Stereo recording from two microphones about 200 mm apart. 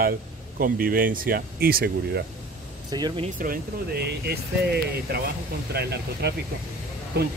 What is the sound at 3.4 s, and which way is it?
Speech, 50° right (ahead or behind).